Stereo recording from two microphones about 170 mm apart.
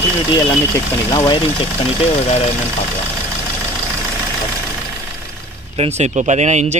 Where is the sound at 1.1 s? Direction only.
25° left (ahead or behind).